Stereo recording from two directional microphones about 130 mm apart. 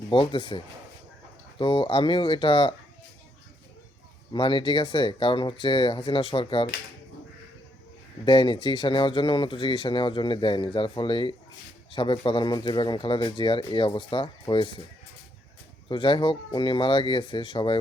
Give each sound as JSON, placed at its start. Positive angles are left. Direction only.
{"t": 0.1, "sound": "speech", "side_deg": 40}
{"t": 4.3, "sound": "speech", "side_deg": 40}
{"t": 8.2, "sound": "speech", "side_deg": 40}
{"t": 15.9, "sound": "speech", "side_deg": 40}